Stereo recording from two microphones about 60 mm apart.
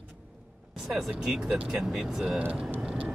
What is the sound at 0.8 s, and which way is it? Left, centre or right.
Speech, centre.